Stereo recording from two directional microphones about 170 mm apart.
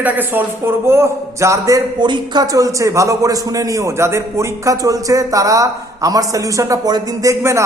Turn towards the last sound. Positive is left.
turn(degrees=-15)  # may be behind; listen again after turning